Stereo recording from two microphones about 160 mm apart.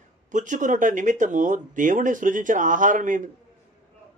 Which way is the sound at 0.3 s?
50° right (ahead or behind).